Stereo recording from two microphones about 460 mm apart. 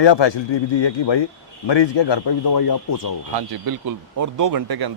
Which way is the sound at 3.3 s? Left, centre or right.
Right.